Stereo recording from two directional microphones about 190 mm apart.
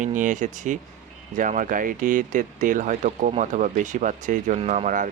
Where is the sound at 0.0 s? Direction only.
40° right (ahead or behind).